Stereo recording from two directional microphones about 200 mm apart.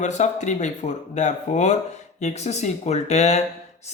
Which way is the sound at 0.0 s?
35° left (ahead or behind).